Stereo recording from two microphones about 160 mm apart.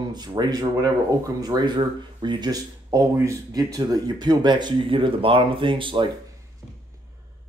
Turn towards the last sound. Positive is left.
turn(degrees=-30)  # may be behind; listen again after turning